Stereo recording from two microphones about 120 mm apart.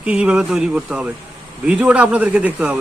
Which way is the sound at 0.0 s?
10° right (ahead or behind).